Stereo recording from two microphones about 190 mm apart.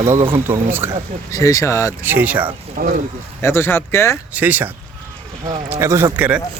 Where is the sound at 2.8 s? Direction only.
45° right (ahead or behind).